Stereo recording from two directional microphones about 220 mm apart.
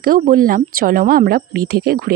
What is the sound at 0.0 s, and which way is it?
A woman's voice, 40° right (ahead or behind).